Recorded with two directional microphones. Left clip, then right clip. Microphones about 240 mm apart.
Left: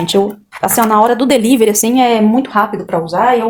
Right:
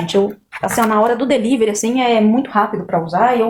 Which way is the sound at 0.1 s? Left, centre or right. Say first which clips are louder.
Right 1 dB; left.